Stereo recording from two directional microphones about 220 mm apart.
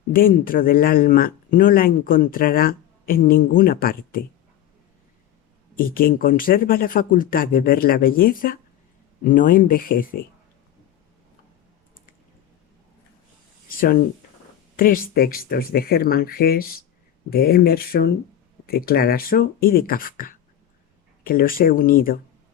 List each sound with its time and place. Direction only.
0.1 s speech: 40° left (ahead or behind)
5.7 s speech: 40° left (ahead or behind)
13.7 s a sound: 40° left (ahead or behind)
14.8 s speech: 40° left (ahead or behind)